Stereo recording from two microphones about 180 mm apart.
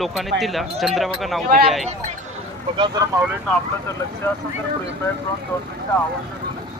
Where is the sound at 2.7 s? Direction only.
25° right (ahead or behind).